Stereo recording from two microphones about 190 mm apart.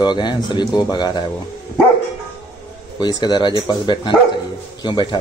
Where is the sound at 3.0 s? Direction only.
20° left (ahead or behind).